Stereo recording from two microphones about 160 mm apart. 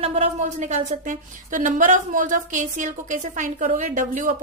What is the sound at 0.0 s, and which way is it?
A woman's voice, 40° right (ahead or behind).